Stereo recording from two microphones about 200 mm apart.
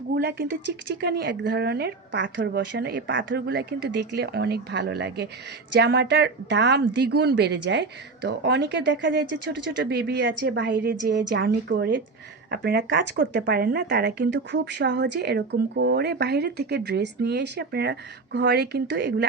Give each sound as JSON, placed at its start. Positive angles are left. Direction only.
{"t": 0.2, "sound": "a woman's voice", "side_deg": -55}